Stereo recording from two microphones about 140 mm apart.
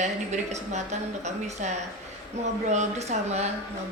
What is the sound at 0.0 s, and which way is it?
A woman's voice, 55° right (ahead or behind).